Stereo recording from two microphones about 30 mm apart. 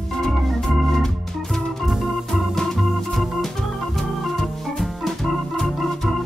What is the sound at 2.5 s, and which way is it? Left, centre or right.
Organ, centre.